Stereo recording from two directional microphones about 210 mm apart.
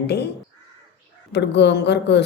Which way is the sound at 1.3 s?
55° left (ahead or behind).